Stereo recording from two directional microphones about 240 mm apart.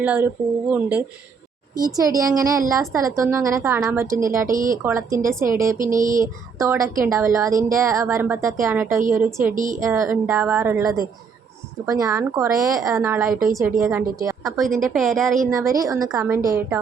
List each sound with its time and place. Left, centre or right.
0.0 s a woman's voice: centre
4.4 s speech: right
4.7 s speech: centre
5.8 s speech: right
6.1 s speech: centre
9.5 s speech: right
9.8 s speech: centre
13.7 s a woman's voice: centre
15.4 s speech: centre